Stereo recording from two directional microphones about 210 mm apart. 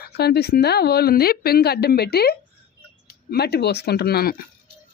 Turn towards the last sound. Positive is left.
turn(degrees=50)  # may be behind; listen again after turning